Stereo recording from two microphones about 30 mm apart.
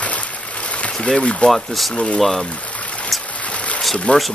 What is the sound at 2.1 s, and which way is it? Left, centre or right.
Speech, centre.